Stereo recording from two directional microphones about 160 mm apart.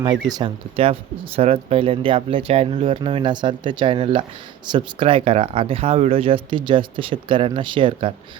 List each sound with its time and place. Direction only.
0.0 s speech: 25° right (ahead or behind)